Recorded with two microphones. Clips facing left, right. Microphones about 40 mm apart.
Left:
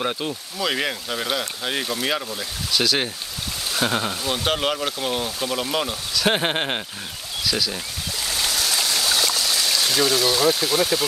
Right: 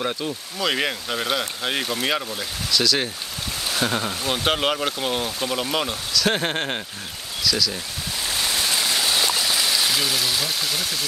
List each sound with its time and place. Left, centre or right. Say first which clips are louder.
0.0 s speech: left 1 dB; centre
0.6 s speech: right 1 dB; centre
2.7 s speech: even; centre
4.2 s speech: right 1 dB; centre
6.1 s speech: left 1 dB; centre
8.3 s stream: even; right; by 10.9 s centre